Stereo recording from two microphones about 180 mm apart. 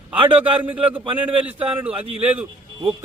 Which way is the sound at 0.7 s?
10° right (ahead or behind).